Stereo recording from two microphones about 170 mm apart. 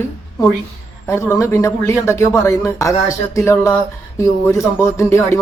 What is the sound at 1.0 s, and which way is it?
A man's voice, 15° left (ahead or behind).